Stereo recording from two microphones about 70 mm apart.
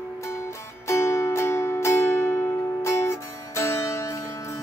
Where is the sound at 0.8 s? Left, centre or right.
Left.